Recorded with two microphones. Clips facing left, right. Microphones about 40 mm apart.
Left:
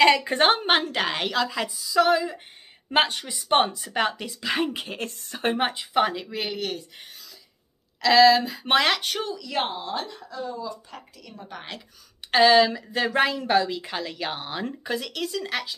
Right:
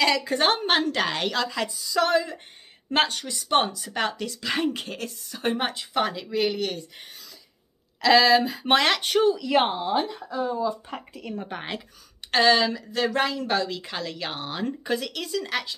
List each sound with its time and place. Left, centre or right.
0.0 s speech: left; by 4.9 s centre
5.1 s a woman's voice: left
5.6 s speech: centre
9.6 s speech: centre
12.3 s speech: centre